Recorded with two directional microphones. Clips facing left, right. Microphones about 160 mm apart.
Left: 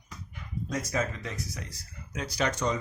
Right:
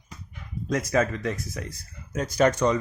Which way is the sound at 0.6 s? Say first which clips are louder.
Right 7 dB; 75° right (ahead or behind).